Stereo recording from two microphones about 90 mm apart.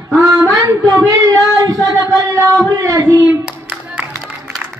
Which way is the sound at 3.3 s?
15° right (ahead or behind).